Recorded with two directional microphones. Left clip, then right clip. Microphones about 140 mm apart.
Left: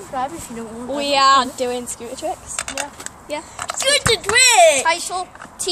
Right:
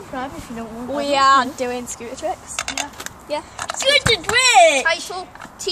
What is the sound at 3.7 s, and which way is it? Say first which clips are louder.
Speech: right 1 dB; 60° left (ahead or behind).